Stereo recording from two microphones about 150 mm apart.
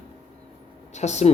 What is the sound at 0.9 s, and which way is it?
Speech, 50° left (ahead or behind).